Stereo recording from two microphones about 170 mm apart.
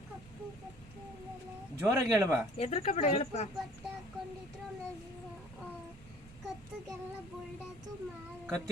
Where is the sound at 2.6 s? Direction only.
40° left (ahead or behind).